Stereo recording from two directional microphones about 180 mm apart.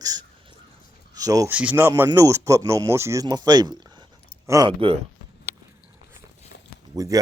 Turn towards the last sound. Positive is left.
turn(degrees=-20)  # may be behind; listen again after turning